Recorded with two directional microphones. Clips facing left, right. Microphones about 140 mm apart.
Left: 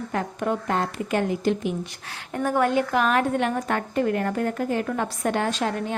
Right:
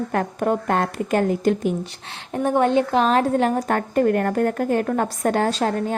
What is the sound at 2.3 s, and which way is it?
A woman's voice, 20° right (ahead or behind).